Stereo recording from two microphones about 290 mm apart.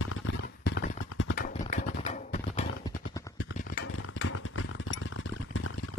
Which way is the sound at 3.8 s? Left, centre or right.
Left.